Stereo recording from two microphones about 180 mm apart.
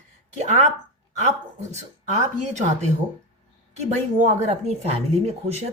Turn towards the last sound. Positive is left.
turn(degrees=-35)  # may be behind; listen again after turning